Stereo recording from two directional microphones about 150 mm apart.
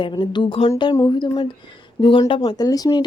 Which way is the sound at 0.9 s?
25° left (ahead or behind).